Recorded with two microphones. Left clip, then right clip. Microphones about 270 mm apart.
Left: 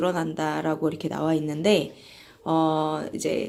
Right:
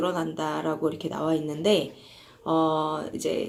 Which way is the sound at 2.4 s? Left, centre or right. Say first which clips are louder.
Left 1 dB; left.